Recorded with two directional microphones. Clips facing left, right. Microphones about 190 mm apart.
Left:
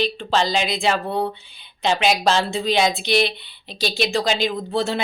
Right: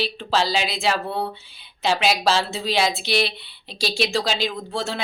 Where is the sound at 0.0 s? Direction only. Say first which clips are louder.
Left 2 dB; 5° right (ahead or behind).